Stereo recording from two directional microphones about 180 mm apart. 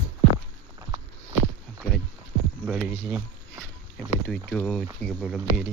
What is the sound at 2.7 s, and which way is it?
Speech, 5° right (ahead or behind).